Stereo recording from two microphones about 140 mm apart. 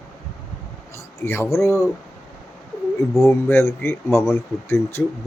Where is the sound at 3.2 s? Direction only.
20° left (ahead or behind).